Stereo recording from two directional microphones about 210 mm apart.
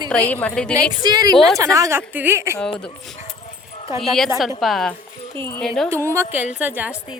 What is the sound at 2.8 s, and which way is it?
Speech, 5° left (ahead or behind).